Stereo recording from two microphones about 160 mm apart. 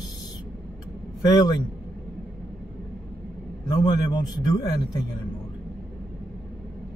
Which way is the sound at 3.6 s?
25° left (ahead or behind).